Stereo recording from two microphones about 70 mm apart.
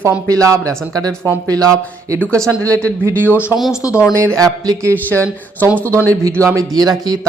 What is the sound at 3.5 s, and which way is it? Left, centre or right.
Speech, centre.